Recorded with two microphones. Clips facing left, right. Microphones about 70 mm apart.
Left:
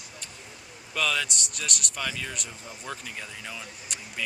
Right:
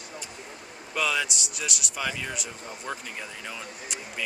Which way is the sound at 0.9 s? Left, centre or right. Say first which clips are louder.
Right 1 dB; centre.